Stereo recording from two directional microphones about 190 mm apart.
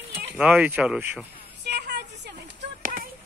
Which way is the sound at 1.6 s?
60° right (ahead or behind).